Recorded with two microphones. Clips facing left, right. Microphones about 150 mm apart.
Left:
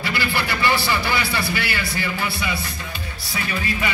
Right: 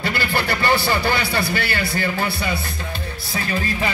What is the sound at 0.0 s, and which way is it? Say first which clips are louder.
Speech: right 2 dB; 50° right (ahead or behind).